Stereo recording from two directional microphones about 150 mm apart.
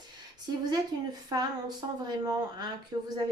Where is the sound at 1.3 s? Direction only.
30° right (ahead or behind).